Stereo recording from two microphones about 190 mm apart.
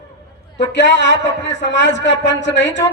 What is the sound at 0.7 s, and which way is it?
A man's voice, 70° left (ahead or behind).